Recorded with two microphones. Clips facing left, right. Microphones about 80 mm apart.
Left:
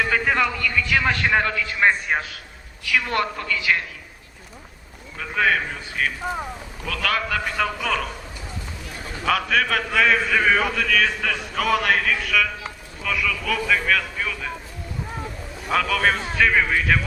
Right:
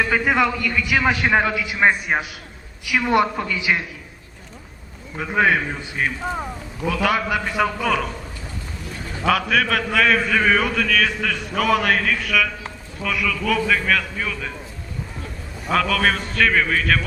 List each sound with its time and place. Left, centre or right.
0.0 s a man's voice: centre
5.1 s a man's voice: centre
6.2 s a man's voice: centre
6.8 s a man's voice: centre
9.2 s a man's voice: centre
15.7 s a man's voice: centre